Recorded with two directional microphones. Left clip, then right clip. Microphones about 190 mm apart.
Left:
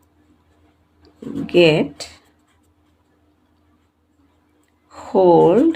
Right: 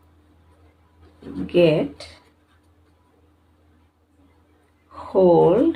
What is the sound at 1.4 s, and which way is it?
Speech, 60° left (ahead or behind).